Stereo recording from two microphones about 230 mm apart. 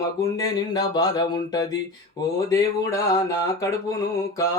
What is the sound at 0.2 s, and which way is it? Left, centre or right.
Speech, centre.